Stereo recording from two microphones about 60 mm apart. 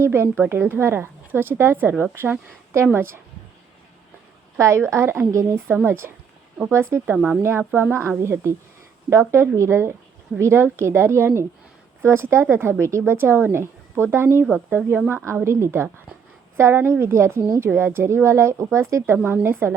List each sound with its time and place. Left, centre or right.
0.0 s a woman's voice: right
4.5 s speech: right
5.2 s a woman's voice: right
5.6 s a woman's voice: right
15.1 s speech: right
19.1 s a woman's voice: right